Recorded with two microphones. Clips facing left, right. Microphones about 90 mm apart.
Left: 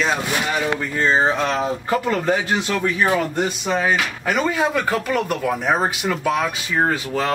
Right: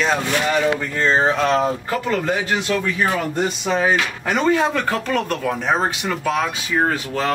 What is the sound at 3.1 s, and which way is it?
Speech, centre (ahead or behind).